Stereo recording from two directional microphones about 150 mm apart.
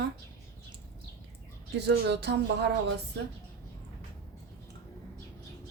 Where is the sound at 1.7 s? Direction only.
90° right.